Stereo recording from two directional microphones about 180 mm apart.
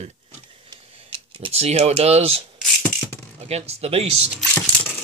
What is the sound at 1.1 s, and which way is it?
Speech, 30° right (ahead or behind).